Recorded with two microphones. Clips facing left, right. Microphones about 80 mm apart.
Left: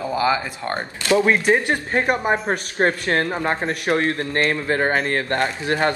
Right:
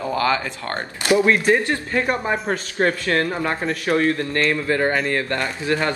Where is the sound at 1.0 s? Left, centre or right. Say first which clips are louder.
Even; right.